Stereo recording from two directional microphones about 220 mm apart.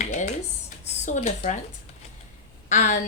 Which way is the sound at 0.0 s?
35° left (ahead or behind).